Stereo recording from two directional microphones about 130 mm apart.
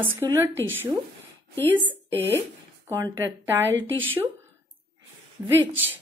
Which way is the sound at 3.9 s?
15° left (ahead or behind).